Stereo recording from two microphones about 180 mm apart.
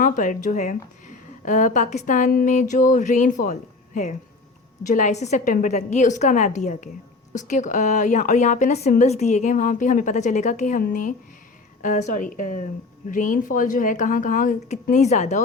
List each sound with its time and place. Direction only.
0.0 s a woman's voice: 45° left (ahead or behind)